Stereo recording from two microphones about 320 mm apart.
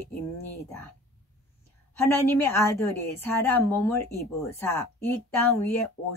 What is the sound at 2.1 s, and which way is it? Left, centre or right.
Speech, centre.